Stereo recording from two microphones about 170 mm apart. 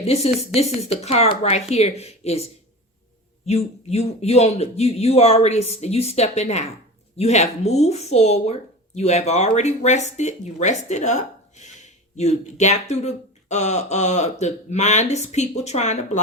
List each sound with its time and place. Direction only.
0.0 s speech: 40° left (ahead or behind)